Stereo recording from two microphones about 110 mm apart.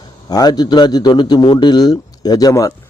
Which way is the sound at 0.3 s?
35° left (ahead or behind).